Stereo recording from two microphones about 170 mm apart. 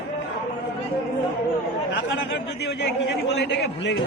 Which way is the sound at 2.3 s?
85° left.